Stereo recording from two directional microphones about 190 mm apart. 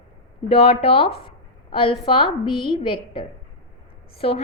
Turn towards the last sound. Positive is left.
turn(degrees=30)  # may be behind; listen again after turning